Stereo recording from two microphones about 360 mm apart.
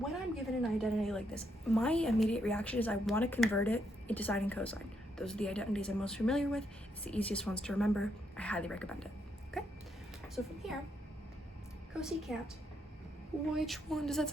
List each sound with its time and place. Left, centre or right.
0.6 s a woman's voice: centre
11.9 s a woman's voice: centre
13.5 s a woman's voice: centre